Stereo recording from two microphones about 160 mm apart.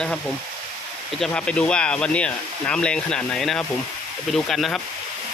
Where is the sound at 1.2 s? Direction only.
5° left (ahead or behind).